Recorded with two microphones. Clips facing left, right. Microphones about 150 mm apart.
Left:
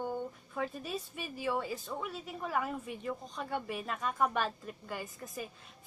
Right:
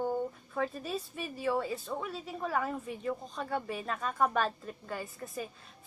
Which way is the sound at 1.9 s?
20° right (ahead or behind).